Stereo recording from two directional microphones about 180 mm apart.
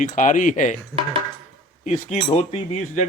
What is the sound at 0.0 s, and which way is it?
Speech, 45° left (ahead or behind).